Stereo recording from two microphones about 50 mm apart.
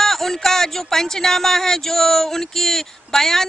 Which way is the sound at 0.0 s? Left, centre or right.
Centre.